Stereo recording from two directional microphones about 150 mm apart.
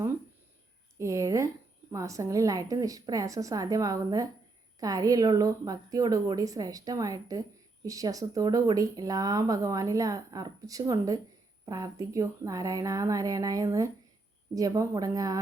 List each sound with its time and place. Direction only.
0.9 s speech: 20° right (ahead or behind)